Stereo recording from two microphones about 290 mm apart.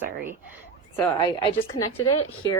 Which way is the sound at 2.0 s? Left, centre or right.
Left.